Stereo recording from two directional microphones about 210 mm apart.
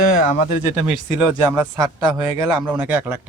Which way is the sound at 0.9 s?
10° right (ahead or behind).